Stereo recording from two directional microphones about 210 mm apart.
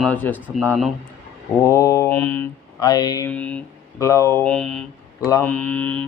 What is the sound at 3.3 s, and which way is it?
Speech, 5° left (ahead or behind).